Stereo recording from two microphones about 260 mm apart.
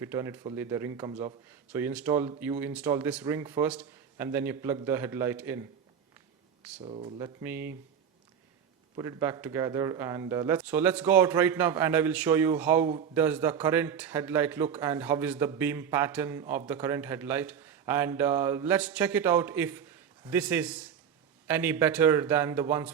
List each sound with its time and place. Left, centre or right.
0.0 s speech: centre
6.8 s speech: right
7.2 s speech: centre
9.0 s speech: centre